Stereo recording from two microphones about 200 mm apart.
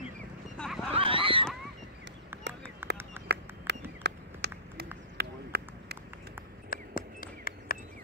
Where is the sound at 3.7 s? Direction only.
60° right (ahead or behind).